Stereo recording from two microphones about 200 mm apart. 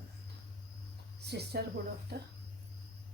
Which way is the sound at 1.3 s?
55° right (ahead or behind).